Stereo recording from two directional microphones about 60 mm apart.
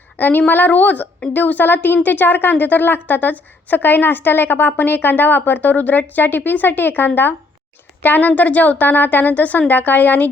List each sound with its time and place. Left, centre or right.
0.2 s a woman's voice: left